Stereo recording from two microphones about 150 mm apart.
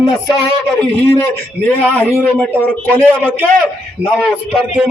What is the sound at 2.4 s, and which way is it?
Speech, 10° left (ahead or behind).